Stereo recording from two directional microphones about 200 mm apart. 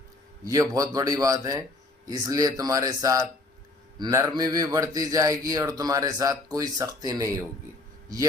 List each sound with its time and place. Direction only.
0.4 s a man's voice: 15° right (ahead or behind)